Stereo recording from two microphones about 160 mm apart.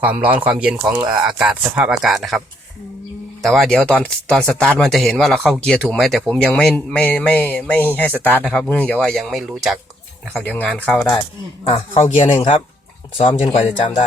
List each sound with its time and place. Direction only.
0.0 s a man's voice: 10° right (ahead or behind)
3.4 s a man's voice: centre (ahead or behind)
11.6 s speech: 40° left (ahead or behind)
13.4 s speech: 35° left (ahead or behind)